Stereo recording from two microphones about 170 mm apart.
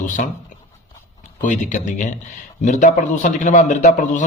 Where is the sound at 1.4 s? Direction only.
45° left (ahead or behind).